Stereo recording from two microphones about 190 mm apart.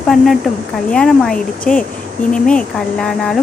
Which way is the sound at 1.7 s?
45° left (ahead or behind).